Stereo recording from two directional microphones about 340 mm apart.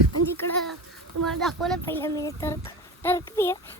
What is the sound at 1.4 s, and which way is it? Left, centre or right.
Speech, centre.